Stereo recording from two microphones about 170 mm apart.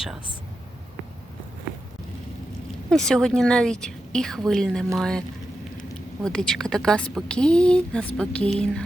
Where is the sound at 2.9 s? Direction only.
5° left (ahead or behind).